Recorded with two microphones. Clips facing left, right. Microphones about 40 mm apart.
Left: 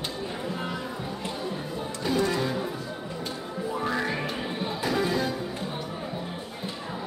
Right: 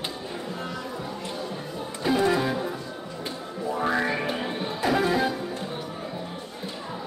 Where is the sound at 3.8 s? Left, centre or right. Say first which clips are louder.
Right 4 dB; centre.